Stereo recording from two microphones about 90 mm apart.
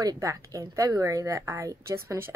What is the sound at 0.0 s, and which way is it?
Speech, 40° right (ahead or behind).